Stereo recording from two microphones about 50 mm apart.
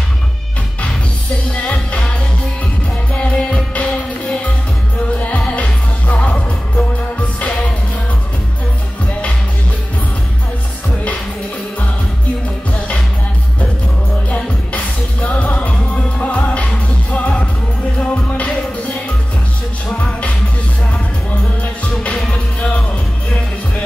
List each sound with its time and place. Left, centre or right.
1.5 s music: left
3.3 s music: left
14.3 s music: left